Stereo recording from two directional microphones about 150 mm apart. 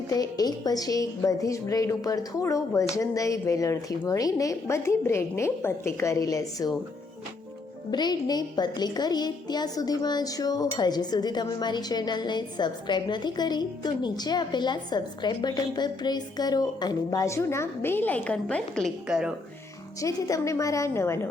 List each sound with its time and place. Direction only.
0.1 s a woman's voice: 25° left (ahead or behind)
7.9 s a woman's voice: 30° left (ahead or behind); by 19.3 s 5° right (ahead or behind)
20.0 s a woman's voice: 20° left (ahead or behind)